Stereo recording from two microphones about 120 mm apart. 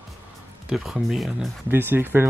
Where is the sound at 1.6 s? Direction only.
15° right (ahead or behind).